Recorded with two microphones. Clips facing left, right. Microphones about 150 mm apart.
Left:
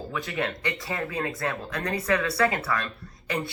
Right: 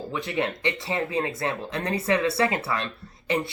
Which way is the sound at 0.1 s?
25° right (ahead or behind).